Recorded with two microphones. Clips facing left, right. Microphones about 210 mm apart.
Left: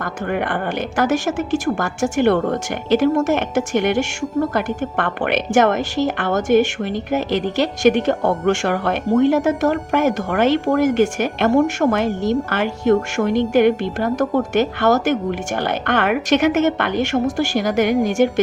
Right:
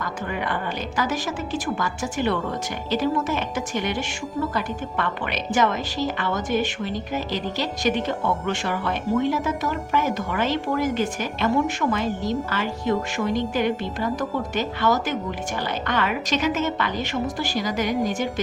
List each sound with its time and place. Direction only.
0.0 s a woman's voice: 55° left (ahead or behind)
3.2 s a woman's voice: 70° left (ahead or behind)